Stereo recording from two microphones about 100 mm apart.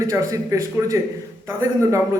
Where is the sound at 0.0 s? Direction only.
30° right (ahead or behind).